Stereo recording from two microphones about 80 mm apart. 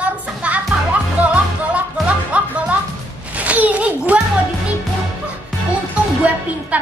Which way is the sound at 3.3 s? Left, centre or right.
Centre.